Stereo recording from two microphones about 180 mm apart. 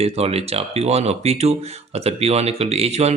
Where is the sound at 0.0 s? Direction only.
35° right (ahead or behind).